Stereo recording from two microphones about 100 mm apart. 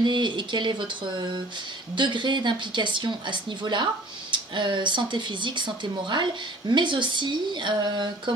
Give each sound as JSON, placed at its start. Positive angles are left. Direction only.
{"t": 0.0, "sound": "speech", "side_deg": -50}
{"t": 6.7, "sound": "speech", "side_deg": -50}